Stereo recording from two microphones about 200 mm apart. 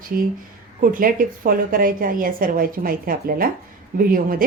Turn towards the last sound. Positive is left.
turn(degrees=-45)  # may be behind; listen again after turning